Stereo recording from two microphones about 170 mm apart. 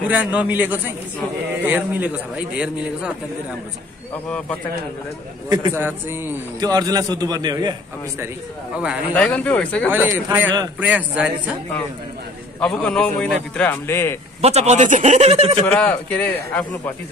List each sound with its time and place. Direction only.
0.1 s a man's voice: 10° right (ahead or behind)
4.1 s a man's voice: 10° left (ahead or behind)
5.5 s a man's voice: 20° right (ahead or behind)
9.1 s a man's voice: 5° left (ahead or behind)
9.8 s a man's voice: 10° right (ahead or behind)
12.5 s a man's voice: 5° left (ahead or behind)
14.4 s a man's voice: 40° right (ahead or behind)
15.6 s a man's voice: 10° left (ahead or behind)